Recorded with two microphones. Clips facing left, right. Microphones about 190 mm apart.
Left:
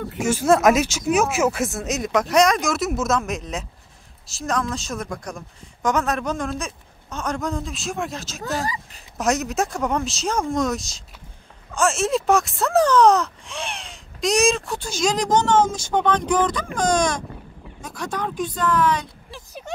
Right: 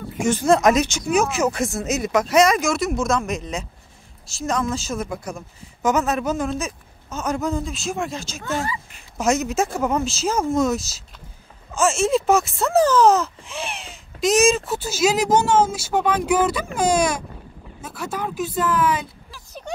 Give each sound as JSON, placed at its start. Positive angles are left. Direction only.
{"t": 0.2, "sound": "speech", "side_deg": 5}
{"t": 8.4, "sound": "speech", "side_deg": 35}
{"t": 9.2, "sound": "speech", "side_deg": 0}